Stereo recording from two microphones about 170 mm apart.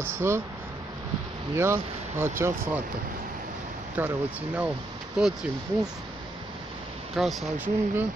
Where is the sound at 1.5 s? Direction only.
15° right (ahead or behind).